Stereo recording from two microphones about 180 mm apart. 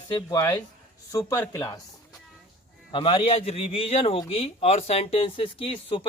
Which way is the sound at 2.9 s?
30° left (ahead or behind).